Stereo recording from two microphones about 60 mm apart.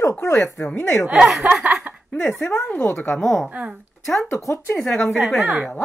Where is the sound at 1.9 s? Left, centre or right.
Right.